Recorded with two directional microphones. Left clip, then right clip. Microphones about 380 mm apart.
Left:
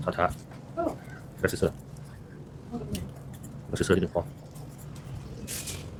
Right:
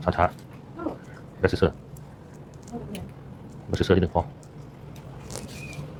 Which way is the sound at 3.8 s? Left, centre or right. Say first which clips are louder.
Right 4 dB; centre.